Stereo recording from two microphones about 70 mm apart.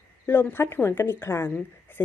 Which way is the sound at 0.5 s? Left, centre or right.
Left.